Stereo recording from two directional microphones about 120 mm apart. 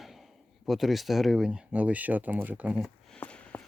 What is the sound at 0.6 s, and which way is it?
Speech, centre (ahead or behind).